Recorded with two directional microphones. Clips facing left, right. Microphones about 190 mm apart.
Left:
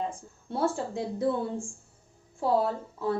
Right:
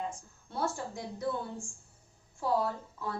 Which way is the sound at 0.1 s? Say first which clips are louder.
Left 7 dB; 30° left (ahead or behind).